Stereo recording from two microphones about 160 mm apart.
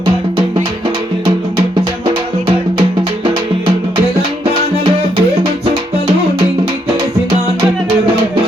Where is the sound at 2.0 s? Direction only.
30° right (ahead or behind).